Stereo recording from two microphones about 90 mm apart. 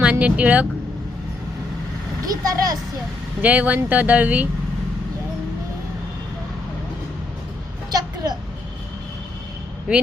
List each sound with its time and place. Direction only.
0.0 s speech: 15° right (ahead or behind)
2.3 s speech: 45° right (ahead or behind)
3.4 s speech: 15° right (ahead or behind)
7.9 s a sound: 50° right (ahead or behind)
9.9 s speech: 10° right (ahead or behind)